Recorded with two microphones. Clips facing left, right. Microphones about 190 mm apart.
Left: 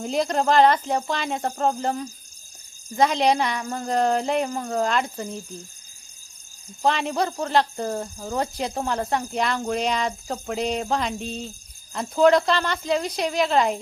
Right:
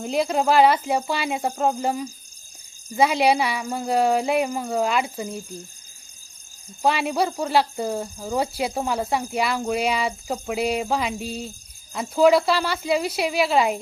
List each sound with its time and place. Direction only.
0.0 s speech: 5° right (ahead or behind)
6.8 s speech: 10° right (ahead or behind)